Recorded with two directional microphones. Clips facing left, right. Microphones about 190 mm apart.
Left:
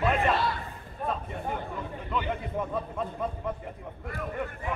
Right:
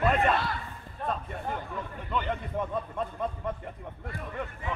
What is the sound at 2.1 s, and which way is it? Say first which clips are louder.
Speech: even; 5° left (ahead or behind).